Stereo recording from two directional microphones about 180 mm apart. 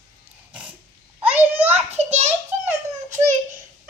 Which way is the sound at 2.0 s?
40° right (ahead or behind).